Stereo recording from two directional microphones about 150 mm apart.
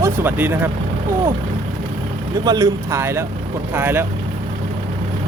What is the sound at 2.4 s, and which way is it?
Speech, 25° right (ahead or behind).